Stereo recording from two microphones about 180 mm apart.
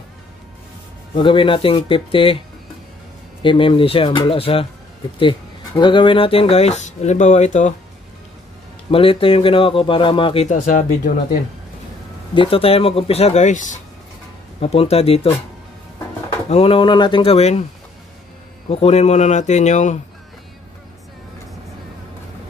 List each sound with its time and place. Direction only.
1.1 s speech: 30° left (ahead or behind)
3.4 s speech: 30° left (ahead or behind)
5.8 s speech: 25° left (ahead or behind)
8.9 s speech: 30° left (ahead or behind)
12.4 s speech: 30° left (ahead or behind)
16.4 s speech: 35° left (ahead or behind)
18.7 s speech: 35° left (ahead or behind)